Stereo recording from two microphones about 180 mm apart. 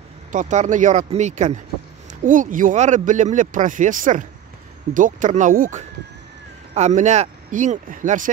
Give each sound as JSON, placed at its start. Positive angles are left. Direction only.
{"t": 0.3, "sound": "speech", "side_deg": -40}